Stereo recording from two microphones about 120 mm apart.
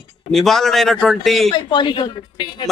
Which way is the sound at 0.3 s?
5° left (ahead or behind).